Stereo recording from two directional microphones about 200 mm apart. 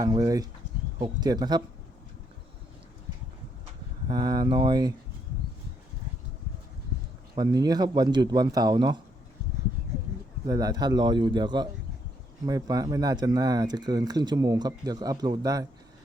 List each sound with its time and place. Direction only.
0.0 s speech: 20° right (ahead or behind)
4.1 s speech: 20° right (ahead or behind)
7.3 s speech: 20° right (ahead or behind)
10.4 s speech: 20° right (ahead or behind)